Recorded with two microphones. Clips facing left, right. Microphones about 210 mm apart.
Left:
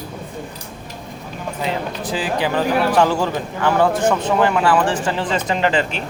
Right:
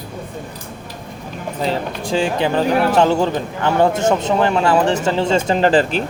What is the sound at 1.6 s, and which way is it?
Speech, 25° right (ahead or behind).